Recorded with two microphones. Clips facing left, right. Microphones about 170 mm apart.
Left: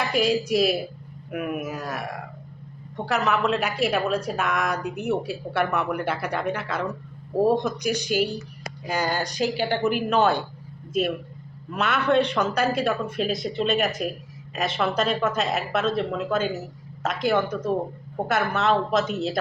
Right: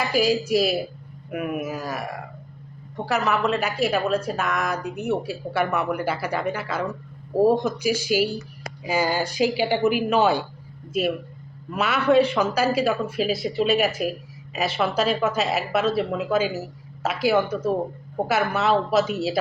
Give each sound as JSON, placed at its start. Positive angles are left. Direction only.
{"t": 0.0, "sound": "speech", "side_deg": 0}
{"t": 11.7, "sound": "speech", "side_deg": -5}